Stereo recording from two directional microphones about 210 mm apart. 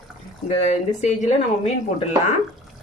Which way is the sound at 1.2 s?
30° left (ahead or behind).